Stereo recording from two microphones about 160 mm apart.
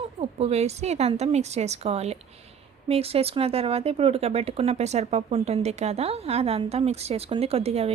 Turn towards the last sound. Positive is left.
turn(degrees=-40)  # may be behind; listen again after turning